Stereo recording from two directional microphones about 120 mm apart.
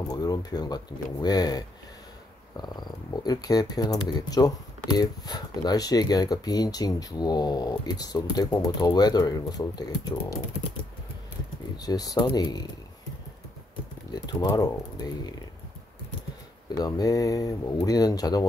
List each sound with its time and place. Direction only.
0.1 s speech: 35° left (ahead or behind)
2.6 s speech: 35° left (ahead or behind)
11.8 s speech: 30° left (ahead or behind)
14.1 s speech: 30° left (ahead or behind)
16.6 s speech: 30° left (ahead or behind)